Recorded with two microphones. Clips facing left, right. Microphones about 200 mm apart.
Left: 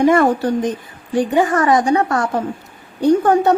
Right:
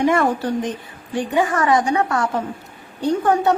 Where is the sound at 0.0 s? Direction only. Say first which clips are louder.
Left 5 dB; 40° left (ahead or behind).